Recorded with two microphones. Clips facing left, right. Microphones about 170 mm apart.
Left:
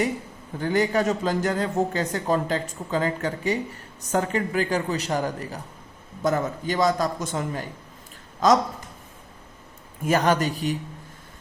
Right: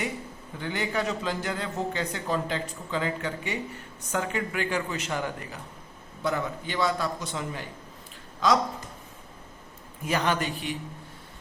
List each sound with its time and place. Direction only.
0.6 s a man's voice: 40° left (ahead or behind)
10.1 s a man's voice: 45° left (ahead or behind)